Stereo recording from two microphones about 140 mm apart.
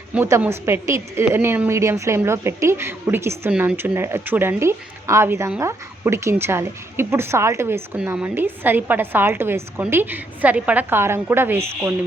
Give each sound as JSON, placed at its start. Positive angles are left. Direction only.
{"t": 0.1, "sound": "a woman's voice", "side_deg": -15}